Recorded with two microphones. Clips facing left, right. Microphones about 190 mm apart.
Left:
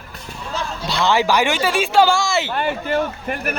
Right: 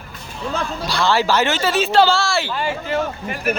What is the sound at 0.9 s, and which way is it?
Speech, 20° left (ahead or behind).